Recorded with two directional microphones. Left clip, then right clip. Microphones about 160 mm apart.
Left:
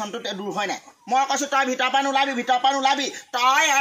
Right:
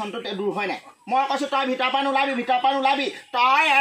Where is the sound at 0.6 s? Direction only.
5° left (ahead or behind).